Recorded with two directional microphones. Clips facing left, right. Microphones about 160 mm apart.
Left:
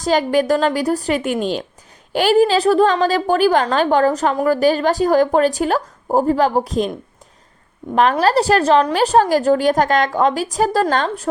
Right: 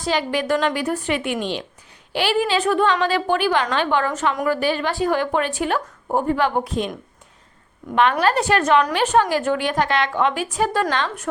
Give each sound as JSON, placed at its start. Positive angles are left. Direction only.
{"t": 0.0, "sound": "a woman's voice", "side_deg": 45}
{"t": 8.2, "sound": "a woman's voice", "side_deg": 35}